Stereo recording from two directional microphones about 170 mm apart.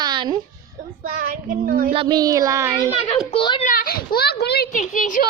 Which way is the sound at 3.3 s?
30° left (ahead or behind).